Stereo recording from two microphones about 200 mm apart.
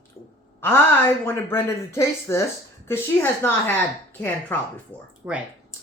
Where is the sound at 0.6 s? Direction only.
10° left (ahead or behind).